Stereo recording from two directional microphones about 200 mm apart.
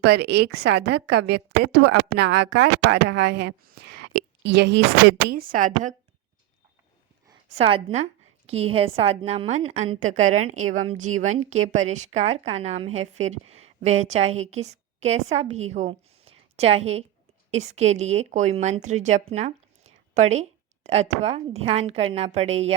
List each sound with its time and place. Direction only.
0.0 s a woman's voice: 55° right (ahead or behind)
5.5 s a woman's voice: 40° right (ahead or behind)
7.5 s a woman's voice: 30° right (ahead or behind)